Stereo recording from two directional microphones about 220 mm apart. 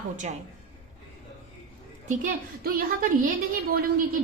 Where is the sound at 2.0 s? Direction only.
40° right (ahead or behind).